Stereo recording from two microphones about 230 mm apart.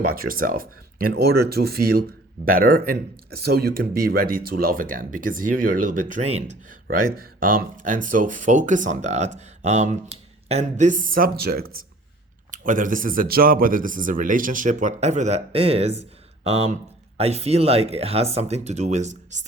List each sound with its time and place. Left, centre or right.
0.0 s speech: right